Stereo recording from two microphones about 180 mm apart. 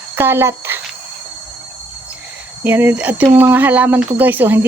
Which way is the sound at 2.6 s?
10° right (ahead or behind).